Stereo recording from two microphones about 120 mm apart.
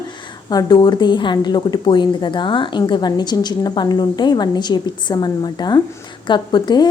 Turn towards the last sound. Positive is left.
turn(degrees=35)  # may be behind; listen again after turning